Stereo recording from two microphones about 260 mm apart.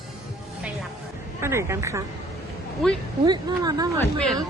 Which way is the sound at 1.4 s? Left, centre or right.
Centre.